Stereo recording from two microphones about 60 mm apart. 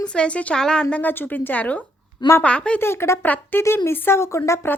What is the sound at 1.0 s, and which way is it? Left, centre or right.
A woman's voice, left.